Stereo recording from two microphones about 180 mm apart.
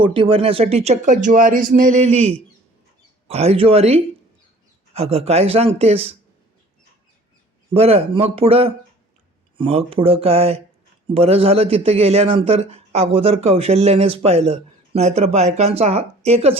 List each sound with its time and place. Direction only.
0.0 s a man's voice: 30° right (ahead or behind)
7.7 s a man's voice: 35° right (ahead or behind)